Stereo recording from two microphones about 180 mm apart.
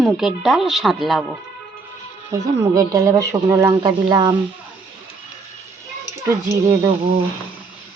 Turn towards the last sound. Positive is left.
turn(degrees=-20)  # may be behind; listen again after turning